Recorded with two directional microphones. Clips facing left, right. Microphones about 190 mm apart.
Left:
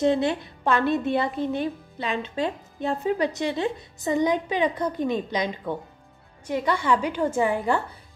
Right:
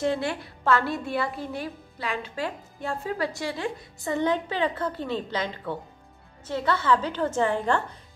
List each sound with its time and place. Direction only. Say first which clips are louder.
0.0 s a woman's voice: left 5 dB; 20° left (ahead or behind)